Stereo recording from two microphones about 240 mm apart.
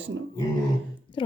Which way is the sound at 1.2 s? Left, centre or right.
Left.